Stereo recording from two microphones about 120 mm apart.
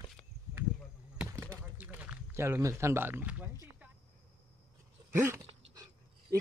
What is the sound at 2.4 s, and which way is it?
Speech, 20° right (ahead or behind).